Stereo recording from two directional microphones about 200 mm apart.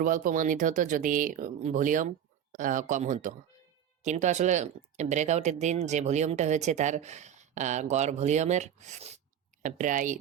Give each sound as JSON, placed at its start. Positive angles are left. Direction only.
{"t": 0.0, "sound": "speech", "side_deg": -40}